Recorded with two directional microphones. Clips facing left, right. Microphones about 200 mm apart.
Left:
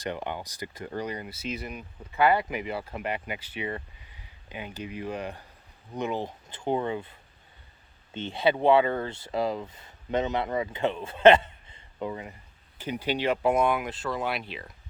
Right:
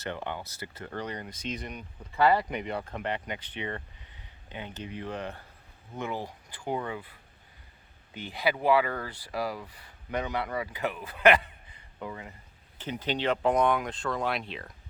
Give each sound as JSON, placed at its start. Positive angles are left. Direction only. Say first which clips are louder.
{"t": 0.0, "sound": "speech", "louder": "left 2 dB", "side_deg": 15}
{"t": 12.8, "sound": "speech", "louder": "left 2 dB", "side_deg": 10}